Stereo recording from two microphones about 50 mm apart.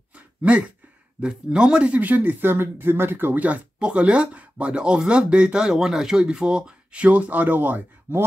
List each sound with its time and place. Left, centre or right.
0.1 s a sound: right
1.2 s speech: centre; by 3.5 s right
3.8 s speech: right